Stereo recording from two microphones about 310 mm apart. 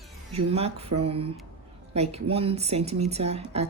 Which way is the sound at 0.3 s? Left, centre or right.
Centre.